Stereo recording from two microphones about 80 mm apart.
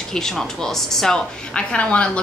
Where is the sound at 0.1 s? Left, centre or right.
Centre.